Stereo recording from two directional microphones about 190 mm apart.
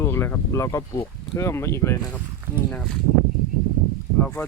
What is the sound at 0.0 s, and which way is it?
Speech, 15° left (ahead or behind).